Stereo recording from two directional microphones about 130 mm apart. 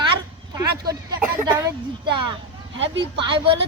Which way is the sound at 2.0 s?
40° right (ahead or behind).